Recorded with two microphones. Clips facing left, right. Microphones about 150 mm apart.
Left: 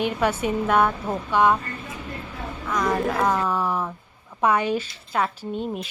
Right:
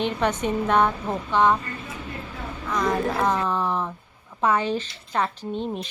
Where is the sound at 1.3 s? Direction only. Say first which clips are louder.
Left 1 dB; 10° left (ahead or behind).